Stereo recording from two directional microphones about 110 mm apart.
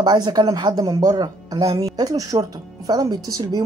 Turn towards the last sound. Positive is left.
turn(degrees=-35)  # may be behind; listen again after turning